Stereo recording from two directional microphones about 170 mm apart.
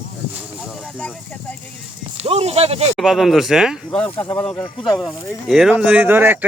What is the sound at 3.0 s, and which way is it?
Speech, centre (ahead or behind).